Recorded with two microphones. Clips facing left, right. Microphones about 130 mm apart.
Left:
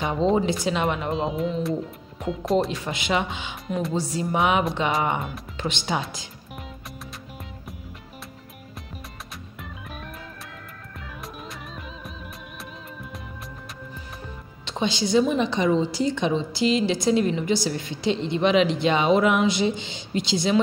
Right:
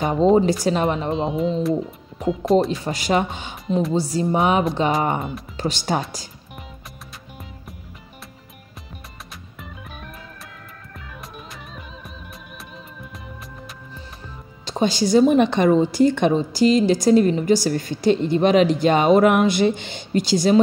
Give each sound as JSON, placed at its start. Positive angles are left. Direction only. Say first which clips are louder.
{"t": 0.0, "sound": "speech", "louder": "right 6 dB", "side_deg": -40}
{"t": 1.1, "sound": "speech", "louder": "right 4 dB", "side_deg": 0}
{"t": 2.8, "sound": "speech", "louder": "right 4 dB", "side_deg": -40}
{"t": 14.6, "sound": "a woman's voice", "louder": "right 5 dB", "side_deg": -40}